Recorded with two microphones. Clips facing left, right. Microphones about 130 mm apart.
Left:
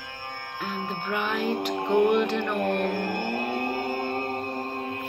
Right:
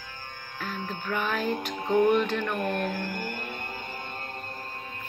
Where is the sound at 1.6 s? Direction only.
70° left (ahead or behind).